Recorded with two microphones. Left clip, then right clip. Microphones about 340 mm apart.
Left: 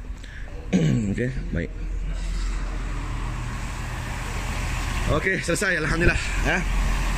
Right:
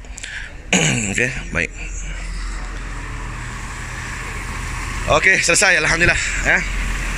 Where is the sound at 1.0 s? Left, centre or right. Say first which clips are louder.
Right 9 dB; right.